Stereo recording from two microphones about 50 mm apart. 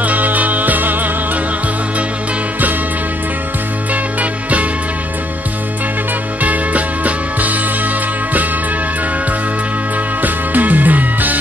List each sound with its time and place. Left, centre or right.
0.0 s music: right
3.9 s music: right
6.4 s music: right
10.2 s music: right